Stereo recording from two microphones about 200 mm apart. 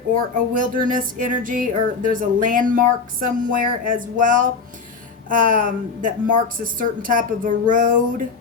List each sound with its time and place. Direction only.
0.1 s music: 45° right (ahead or behind)
5.3 s speech: 45° right (ahead or behind)